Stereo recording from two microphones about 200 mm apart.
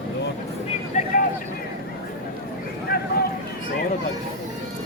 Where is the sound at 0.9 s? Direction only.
35° left (ahead or behind).